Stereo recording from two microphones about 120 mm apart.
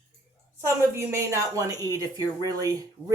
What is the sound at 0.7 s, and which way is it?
Speech, 25° right (ahead or behind).